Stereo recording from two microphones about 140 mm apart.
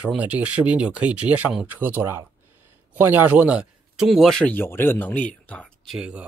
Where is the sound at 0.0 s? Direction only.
10° right (ahead or behind); by 5.9 s 10° left (ahead or behind).